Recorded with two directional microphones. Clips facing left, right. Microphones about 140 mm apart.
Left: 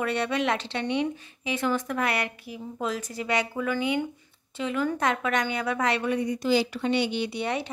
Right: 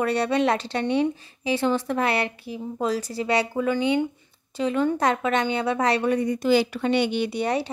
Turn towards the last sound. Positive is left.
turn(degrees=-40)  # may be behind; listen again after turning